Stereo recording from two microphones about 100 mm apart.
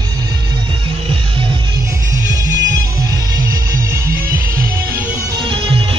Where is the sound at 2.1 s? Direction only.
35° right (ahead or behind).